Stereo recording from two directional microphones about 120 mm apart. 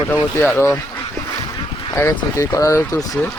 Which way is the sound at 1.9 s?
25° left (ahead or behind).